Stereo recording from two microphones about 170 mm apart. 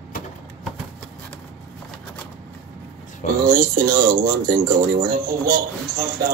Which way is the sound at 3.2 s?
45° left (ahead or behind).